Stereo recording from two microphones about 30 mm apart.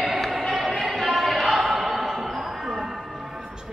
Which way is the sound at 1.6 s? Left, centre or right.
Centre.